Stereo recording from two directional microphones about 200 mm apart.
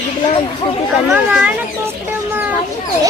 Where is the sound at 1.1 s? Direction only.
5° right (ahead or behind).